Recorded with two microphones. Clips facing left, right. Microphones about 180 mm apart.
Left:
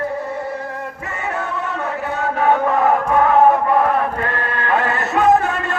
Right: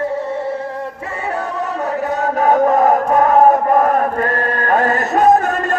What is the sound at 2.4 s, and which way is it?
Chant, 40° right (ahead or behind).